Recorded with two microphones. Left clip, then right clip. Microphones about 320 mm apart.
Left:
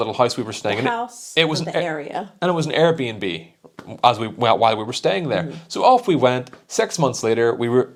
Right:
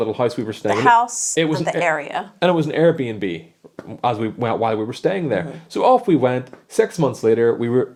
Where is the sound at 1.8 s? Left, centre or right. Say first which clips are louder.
Right 6 dB; right.